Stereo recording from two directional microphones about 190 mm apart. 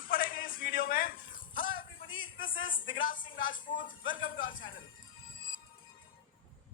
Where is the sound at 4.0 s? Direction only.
90° left.